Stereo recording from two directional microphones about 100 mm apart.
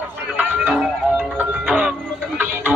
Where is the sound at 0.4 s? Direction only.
10° right (ahead or behind).